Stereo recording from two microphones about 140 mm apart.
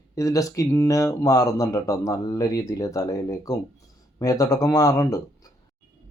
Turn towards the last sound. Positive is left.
turn(degrees=25)  # may be behind; listen again after turning